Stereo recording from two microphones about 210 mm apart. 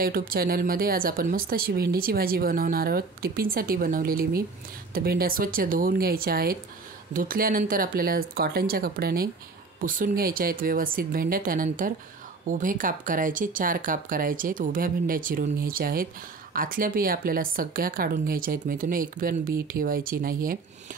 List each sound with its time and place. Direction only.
0.0 s speech: 45° right (ahead or behind)